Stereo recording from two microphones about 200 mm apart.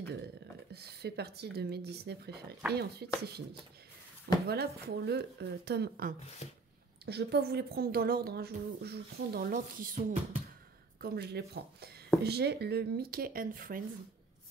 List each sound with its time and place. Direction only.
0.7 s speech: 55° right (ahead or behind)
4.5 s speech: 55° right (ahead or behind)
6.4 s speech: 35° left (ahead or behind)
7.1 s speech: 55° right (ahead or behind)
11.0 s speech: 55° right (ahead or behind)